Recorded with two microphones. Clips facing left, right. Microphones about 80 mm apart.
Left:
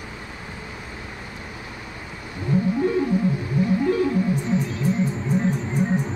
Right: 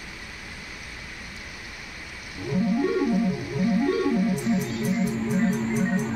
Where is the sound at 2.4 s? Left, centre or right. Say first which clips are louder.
Left 2 dB; centre.